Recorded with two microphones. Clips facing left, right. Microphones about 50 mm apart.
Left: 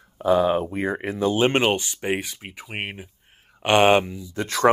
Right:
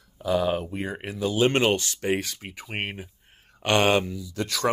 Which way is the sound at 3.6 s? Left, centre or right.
Left.